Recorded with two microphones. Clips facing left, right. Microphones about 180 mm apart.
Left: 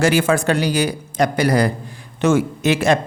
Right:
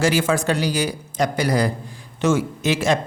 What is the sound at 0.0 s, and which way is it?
A man's voice, 60° left (ahead or behind).